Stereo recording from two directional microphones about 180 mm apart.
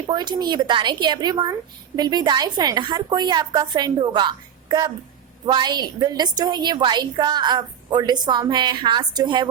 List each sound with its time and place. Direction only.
0.1 s a woman's voice: 25° right (ahead or behind)